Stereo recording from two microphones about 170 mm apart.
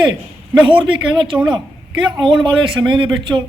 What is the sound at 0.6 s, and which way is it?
A man's voice, 30° right (ahead or behind).